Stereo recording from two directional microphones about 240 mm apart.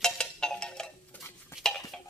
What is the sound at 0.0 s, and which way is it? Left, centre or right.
Dishes, centre.